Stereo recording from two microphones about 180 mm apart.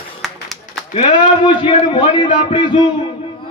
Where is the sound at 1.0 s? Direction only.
25° left (ahead or behind).